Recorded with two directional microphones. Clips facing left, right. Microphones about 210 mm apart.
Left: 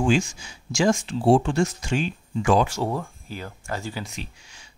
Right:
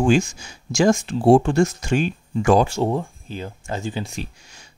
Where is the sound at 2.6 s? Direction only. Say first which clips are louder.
Right 5 dB; 25° right (ahead or behind).